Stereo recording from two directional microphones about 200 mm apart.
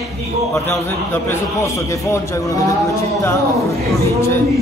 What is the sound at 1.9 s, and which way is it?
Speech, 15° left (ahead or behind).